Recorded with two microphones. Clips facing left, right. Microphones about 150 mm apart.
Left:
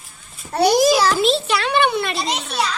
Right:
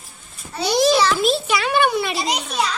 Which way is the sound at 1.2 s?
5° right (ahead or behind).